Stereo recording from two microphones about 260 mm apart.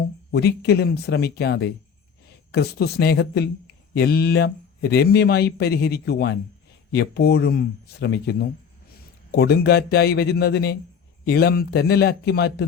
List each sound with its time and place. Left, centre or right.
0.3 s speech: left